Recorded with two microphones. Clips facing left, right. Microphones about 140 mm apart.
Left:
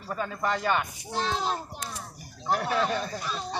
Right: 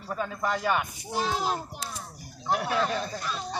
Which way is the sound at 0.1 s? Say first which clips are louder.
Even; 5° right (ahead or behind).